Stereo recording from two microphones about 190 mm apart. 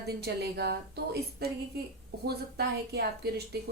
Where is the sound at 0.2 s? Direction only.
60° right (ahead or behind).